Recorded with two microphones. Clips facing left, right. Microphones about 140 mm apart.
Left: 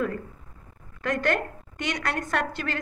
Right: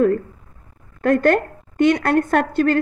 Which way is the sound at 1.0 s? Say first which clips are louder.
Right 10 dB; 50° right (ahead or behind).